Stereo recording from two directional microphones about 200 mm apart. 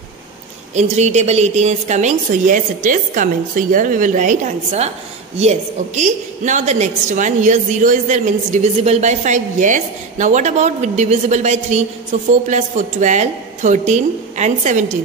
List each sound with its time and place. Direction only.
0.7 s a woman's voice: 35° right (ahead or behind)